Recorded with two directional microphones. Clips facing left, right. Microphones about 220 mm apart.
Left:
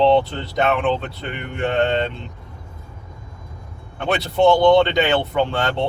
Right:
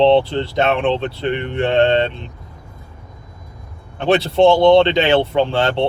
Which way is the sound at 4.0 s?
30° right (ahead or behind).